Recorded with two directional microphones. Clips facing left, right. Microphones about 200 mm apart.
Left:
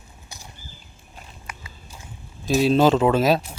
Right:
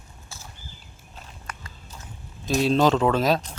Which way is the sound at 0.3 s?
15° left (ahead or behind).